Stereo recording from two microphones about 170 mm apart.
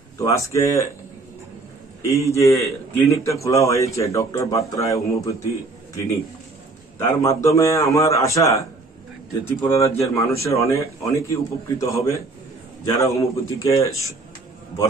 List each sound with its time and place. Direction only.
0.2 s a man's voice: 20° left (ahead or behind)
2.0 s a man's voice: 15° left (ahead or behind)
7.0 s a man's voice: 15° left (ahead or behind)